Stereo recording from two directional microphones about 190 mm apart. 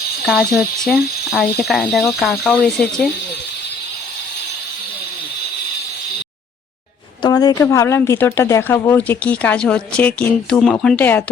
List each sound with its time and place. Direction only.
0.3 s speech: centre (ahead or behind)
7.2 s speech: 20° left (ahead or behind)